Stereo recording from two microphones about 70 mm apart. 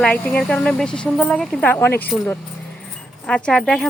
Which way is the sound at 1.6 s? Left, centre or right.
Left.